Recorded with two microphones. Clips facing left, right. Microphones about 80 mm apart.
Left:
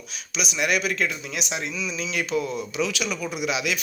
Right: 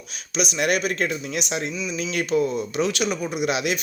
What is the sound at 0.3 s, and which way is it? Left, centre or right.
Speech, right.